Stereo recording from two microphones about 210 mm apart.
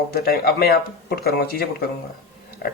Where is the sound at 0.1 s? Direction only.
45° left (ahead or behind).